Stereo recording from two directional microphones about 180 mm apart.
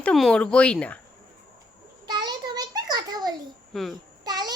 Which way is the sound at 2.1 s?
25° right (ahead or behind).